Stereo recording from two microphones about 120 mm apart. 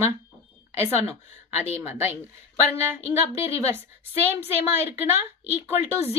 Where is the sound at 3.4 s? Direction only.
25° right (ahead or behind).